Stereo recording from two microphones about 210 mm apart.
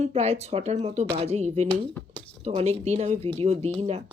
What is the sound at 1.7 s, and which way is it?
Speech, 5° left (ahead or behind).